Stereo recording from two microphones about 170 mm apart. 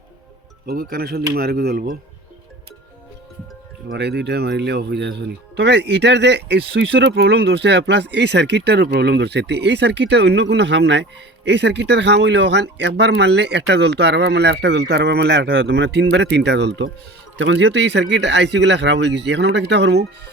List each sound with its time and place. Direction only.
0.7 s speech: 60° right (ahead or behind)
3.8 s speech: 75° right (ahead or behind)